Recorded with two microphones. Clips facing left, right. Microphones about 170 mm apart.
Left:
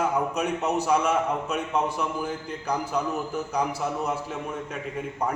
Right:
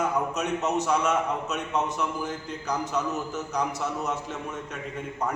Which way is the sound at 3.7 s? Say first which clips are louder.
Left 2 dB; 30° left (ahead or behind).